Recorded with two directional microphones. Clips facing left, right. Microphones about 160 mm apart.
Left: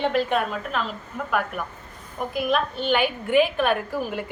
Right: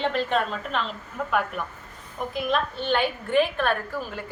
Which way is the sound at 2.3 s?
10° left (ahead or behind).